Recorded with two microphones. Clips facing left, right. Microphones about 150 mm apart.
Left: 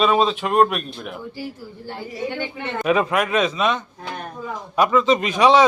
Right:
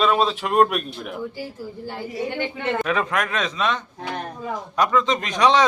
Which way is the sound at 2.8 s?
10° left (ahead or behind).